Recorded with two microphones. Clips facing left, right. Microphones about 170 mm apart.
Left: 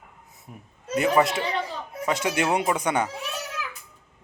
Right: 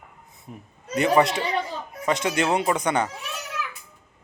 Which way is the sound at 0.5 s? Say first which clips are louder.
Left 2 dB; 5° left (ahead or behind).